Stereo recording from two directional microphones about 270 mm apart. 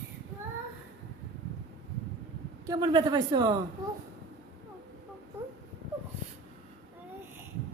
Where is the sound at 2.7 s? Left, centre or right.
Centre.